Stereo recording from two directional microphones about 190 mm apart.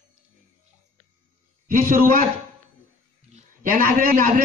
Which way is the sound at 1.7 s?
50° right (ahead or behind).